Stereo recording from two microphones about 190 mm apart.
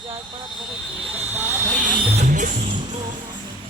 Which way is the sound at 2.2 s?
40° right (ahead or behind).